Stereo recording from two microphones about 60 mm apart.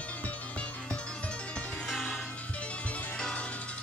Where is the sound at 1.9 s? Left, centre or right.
Centre.